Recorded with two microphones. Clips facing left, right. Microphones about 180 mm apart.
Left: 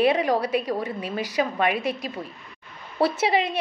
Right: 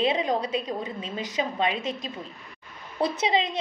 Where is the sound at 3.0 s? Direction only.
20° right (ahead or behind).